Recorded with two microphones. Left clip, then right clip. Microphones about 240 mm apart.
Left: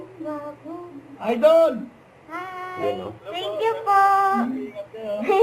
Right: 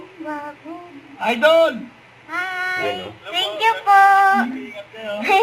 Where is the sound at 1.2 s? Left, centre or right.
Centre.